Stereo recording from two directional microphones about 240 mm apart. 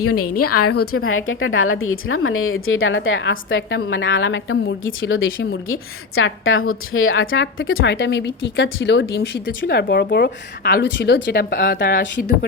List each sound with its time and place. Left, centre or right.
0.0 s a woman's voice: left
0.8 s speech: left